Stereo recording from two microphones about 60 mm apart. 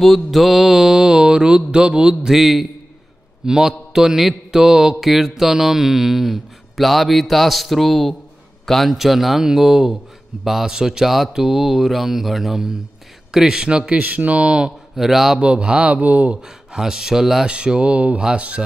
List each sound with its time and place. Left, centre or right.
0.0 s mantra: centre
8.6 s a man's voice: centre
8.9 s mantra: centre
15.0 s mantra: centre
15.3 s speech: centre
16.3 s mantra: centre